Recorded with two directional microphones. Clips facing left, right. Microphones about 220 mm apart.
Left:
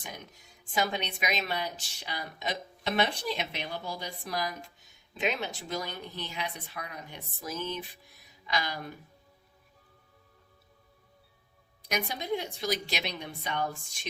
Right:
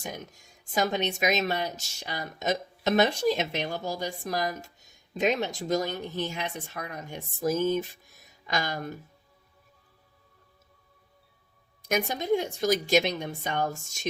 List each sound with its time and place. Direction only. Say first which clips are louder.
0.0 s a woman's voice: right 6 dB; 45° right (ahead or behind)
11.9 s a woman's voice: right 6 dB; 45° right (ahead or behind)